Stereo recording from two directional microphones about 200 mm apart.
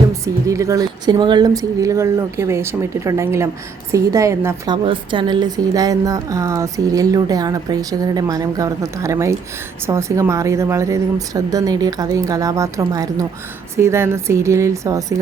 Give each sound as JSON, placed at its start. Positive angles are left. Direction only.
{"t": 0.1, "sound": "a woman's voice", "side_deg": -15}